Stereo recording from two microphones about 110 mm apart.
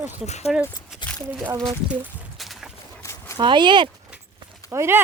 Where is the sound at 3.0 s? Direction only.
25° left (ahead or behind).